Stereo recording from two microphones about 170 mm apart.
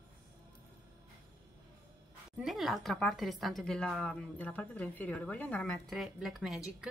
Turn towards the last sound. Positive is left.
turn(degrees=0)  # may be behind; listen again after turning